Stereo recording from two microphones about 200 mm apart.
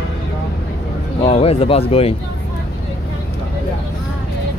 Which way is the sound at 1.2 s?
30° left (ahead or behind).